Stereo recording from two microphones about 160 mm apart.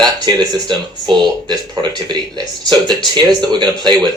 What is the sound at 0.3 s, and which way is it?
Speech, 30° right (ahead or behind).